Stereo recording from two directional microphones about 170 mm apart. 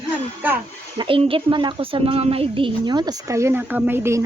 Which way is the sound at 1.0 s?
30° right (ahead or behind).